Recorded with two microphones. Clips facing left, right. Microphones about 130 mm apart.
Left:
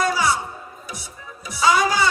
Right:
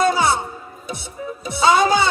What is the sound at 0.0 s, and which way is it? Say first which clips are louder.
Music: right 4 dB; 25° right (ahead or behind).